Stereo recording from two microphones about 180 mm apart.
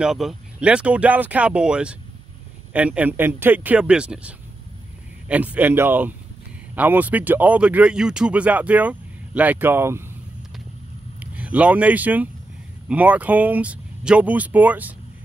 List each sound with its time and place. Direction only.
0.0 s speech: centre (ahead or behind)
11.1 s speech: 10° right (ahead or behind)